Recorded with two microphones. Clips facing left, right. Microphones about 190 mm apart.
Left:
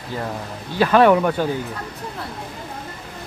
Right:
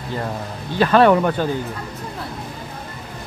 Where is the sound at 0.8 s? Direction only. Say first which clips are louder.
Even; 10° left (ahead or behind).